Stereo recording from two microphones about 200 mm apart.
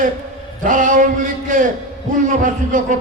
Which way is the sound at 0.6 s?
40° right (ahead or behind).